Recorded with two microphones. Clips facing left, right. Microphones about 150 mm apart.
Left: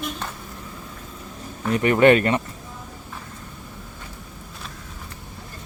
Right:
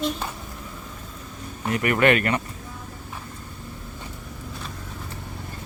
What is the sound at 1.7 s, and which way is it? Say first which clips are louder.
Speech: left 5 dB; 30° left (ahead or behind).